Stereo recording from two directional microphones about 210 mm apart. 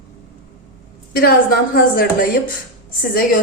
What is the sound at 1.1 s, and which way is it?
A woman's voice, 45° left (ahead or behind).